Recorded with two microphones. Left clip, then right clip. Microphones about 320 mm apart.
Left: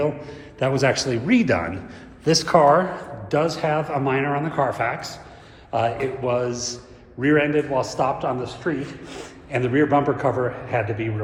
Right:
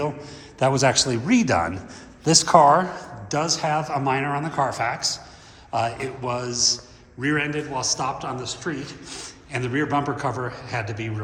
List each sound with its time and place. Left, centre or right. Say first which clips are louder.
0.0 s a man's voice: left 4 dB; centre